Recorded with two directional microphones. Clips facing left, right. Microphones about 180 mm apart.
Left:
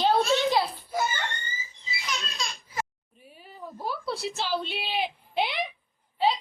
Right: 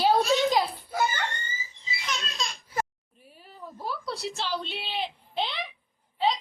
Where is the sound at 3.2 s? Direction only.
Centre (ahead or behind).